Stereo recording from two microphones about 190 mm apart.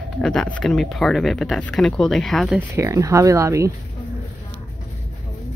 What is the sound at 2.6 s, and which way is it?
Speech, 15° right (ahead or behind).